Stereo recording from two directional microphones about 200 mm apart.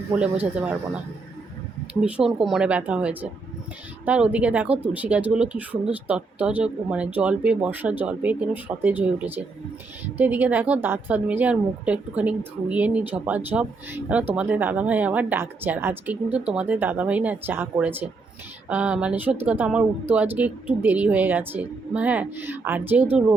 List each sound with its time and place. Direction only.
0.2 s a woman's voice: 5° right (ahead or behind)
1.9 s a woman's voice: 5° right (ahead or behind)